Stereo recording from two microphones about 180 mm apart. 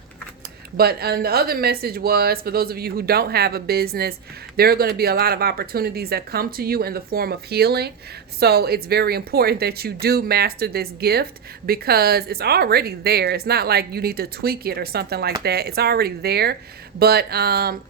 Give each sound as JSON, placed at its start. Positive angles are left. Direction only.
{"t": 0.8, "sound": "speech", "side_deg": -60}